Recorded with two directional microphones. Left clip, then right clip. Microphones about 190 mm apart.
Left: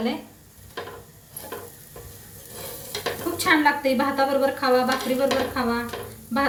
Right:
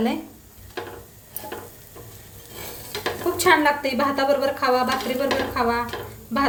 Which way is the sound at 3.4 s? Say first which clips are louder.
Right 2 dB; 50° right (ahead or behind).